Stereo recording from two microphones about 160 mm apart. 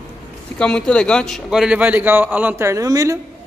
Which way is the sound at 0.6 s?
5° left (ahead or behind).